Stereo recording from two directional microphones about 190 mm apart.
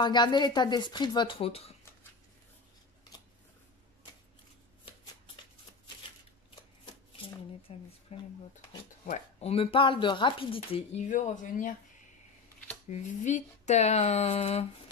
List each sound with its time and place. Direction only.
0.0 s speech: 25° left (ahead or behind)
6.5 s shuffling cards: 25° left (ahead or behind)
7.6 s a sound: 30° left (ahead or behind)
9.0 s speech: 35° left (ahead or behind)
12.8 s speech: 40° left (ahead or behind)